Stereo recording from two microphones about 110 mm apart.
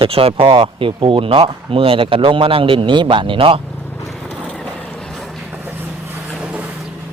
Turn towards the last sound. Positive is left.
turn(degrees=-10)  # may be behind; listen again after turning